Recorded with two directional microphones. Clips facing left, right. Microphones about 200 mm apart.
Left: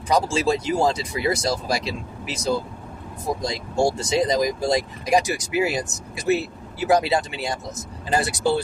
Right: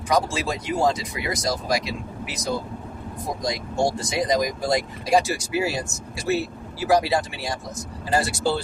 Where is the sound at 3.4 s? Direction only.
25° left (ahead or behind).